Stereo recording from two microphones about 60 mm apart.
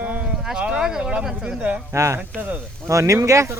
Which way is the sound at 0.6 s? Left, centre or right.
Centre.